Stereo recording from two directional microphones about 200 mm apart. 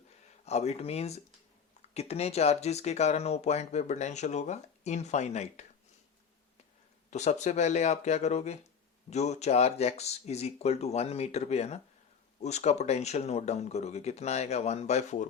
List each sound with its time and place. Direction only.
0.4 s speech: 35° left (ahead or behind)
7.1 s speech: 35° left (ahead or behind)